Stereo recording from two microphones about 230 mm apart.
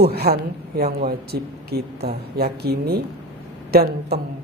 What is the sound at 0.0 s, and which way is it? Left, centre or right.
Speech, right.